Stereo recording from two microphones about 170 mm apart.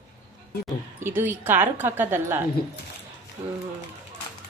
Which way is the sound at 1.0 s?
10° right (ahead or behind).